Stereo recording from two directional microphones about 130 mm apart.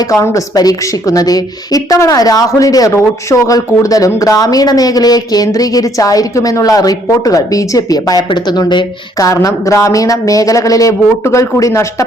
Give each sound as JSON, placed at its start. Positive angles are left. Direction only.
{"t": 0.0, "sound": "a woman's voice", "side_deg": 25}